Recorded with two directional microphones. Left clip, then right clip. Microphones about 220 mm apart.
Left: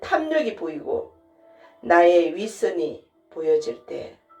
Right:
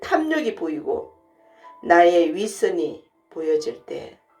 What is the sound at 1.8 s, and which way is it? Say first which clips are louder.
Speech: right 1 dB; 45° right (ahead or behind).